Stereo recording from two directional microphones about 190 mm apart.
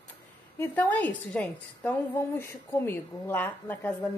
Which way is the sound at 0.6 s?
10° left (ahead or behind).